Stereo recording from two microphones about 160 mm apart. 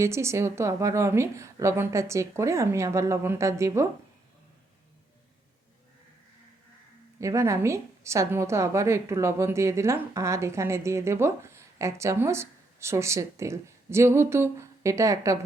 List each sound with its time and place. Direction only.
0.0 s a woman's voice: 15° right (ahead or behind)
7.2 s a woman's voice: 20° right (ahead or behind)